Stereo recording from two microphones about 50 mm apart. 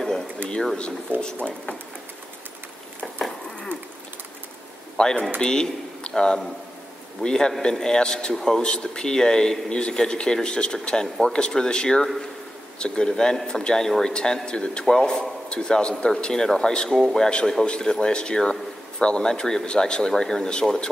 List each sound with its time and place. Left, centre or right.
1.2 s speech: left
4.9 s a man's voice: centre
17.3 s a man's voice: centre